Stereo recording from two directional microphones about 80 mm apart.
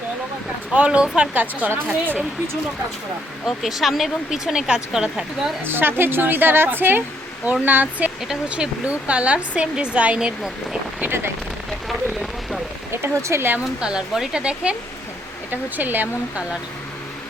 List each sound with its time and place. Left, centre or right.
0.7 s a woman's voice: centre
3.4 s speech: centre
5.6 s a woman's voice: right; by 11.1 s centre
11.9 s rain on surface: centre
12.9 s speech: right
13.8 s a woman's voice: centre